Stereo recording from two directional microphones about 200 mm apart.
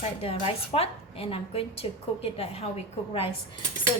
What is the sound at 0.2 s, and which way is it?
A woman's voice, 30° left (ahead or behind).